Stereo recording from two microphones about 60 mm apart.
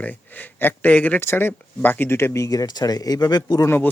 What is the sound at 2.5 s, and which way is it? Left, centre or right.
Speech, left.